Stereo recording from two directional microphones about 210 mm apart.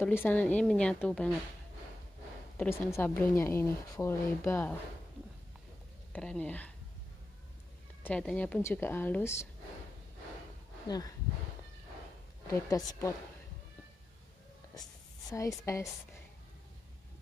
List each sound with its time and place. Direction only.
0.0 s a woman's voice: 10° left (ahead or behind)
2.5 s speech: 10° left (ahead or behind)
6.1 s speech: 5° left (ahead or behind)
8.0 s speech: 5° left (ahead or behind)
10.9 s speech: 20° left (ahead or behind)
12.4 s speech: 15° left (ahead or behind)
14.8 s speech: 15° left (ahead or behind)